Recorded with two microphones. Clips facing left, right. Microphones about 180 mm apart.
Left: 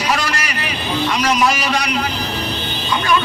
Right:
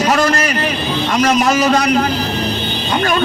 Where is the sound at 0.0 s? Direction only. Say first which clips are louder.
Right 7 dB; 45° right (ahead or behind).